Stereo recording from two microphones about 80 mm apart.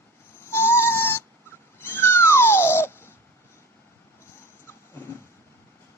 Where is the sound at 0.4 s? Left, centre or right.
Left.